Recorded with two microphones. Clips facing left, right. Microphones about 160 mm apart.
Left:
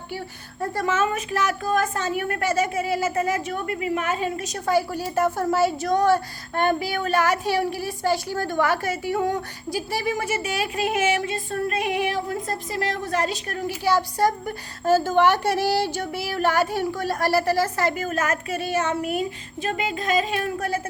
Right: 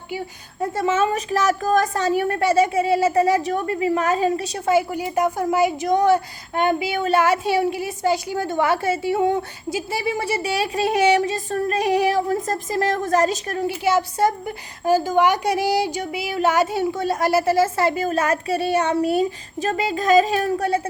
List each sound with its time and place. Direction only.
0.6 s a woman's voice: 25° right (ahead or behind)